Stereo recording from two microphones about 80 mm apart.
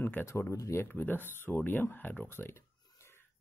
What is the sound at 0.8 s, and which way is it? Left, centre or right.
Speech, left.